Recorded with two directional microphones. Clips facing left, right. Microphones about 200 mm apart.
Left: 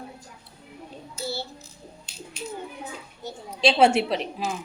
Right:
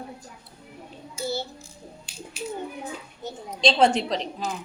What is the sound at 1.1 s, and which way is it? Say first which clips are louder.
Child singing: right 3 dB; 20° right (ahead or behind).